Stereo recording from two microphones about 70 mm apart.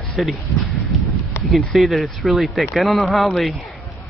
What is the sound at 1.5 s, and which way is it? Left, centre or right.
Speech, centre.